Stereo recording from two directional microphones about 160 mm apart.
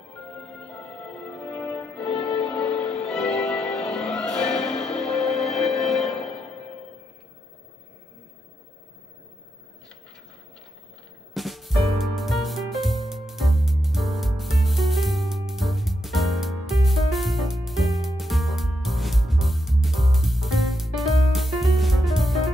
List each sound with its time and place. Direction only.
0.4 s music: 5° left (ahead or behind)
11.3 s music: centre (ahead or behind)